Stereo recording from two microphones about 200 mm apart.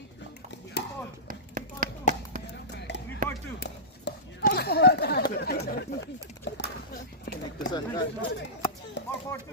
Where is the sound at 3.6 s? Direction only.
50° left (ahead or behind).